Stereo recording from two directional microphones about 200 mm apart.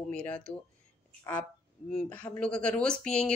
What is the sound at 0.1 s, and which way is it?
Speech, 5° left (ahead or behind).